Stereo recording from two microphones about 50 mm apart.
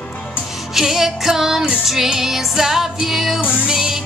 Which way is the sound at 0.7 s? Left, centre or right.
Centre.